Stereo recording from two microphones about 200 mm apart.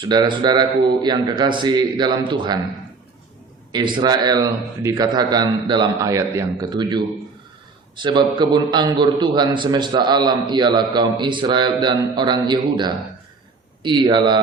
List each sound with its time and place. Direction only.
0.0 s a man's voice: 20° right (ahead or behind)
3.7 s a man's voice: 25° right (ahead or behind)